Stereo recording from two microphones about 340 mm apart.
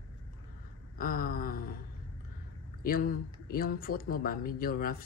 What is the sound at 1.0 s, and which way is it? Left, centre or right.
Speech, left.